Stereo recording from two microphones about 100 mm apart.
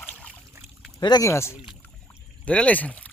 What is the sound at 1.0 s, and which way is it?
Speech, 45° left (ahead or behind).